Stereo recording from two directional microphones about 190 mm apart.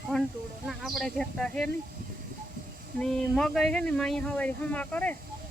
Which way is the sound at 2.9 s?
5° left (ahead or behind).